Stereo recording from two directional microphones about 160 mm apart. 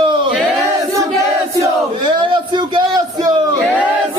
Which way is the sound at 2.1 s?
30° right (ahead or behind).